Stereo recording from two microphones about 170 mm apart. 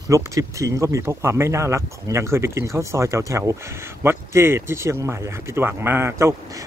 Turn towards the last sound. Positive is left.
turn(degrees=-15)  # may be behind; listen again after turning